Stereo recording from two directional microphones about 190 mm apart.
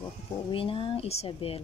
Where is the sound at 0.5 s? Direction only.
25° left (ahead or behind).